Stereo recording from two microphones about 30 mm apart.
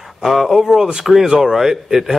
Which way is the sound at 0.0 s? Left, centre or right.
Centre.